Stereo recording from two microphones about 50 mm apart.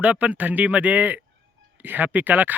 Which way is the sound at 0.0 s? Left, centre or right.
Right.